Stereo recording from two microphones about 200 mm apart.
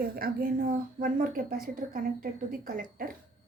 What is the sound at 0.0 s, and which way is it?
A woman's voice, 45° right (ahead or behind).